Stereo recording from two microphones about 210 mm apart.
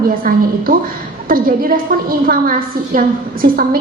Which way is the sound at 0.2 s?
40° right (ahead or behind).